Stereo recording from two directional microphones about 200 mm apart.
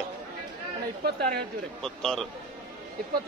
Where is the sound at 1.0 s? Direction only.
50° right (ahead or behind).